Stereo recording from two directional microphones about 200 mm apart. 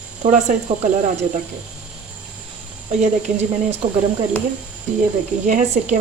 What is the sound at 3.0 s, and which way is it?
Speech, 35° right (ahead or behind).